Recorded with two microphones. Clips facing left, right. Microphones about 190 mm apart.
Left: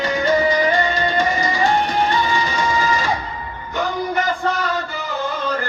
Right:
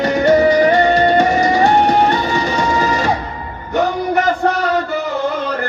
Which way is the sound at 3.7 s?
70° right (ahead or behind).